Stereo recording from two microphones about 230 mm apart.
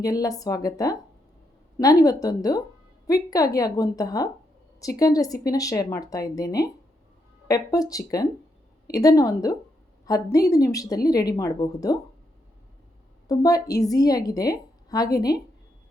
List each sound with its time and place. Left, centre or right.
0.0 s a woman's voice: centre
13.2 s a woman's voice: centre